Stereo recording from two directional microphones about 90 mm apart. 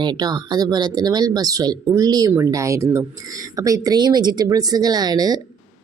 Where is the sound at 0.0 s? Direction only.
50° right (ahead or behind).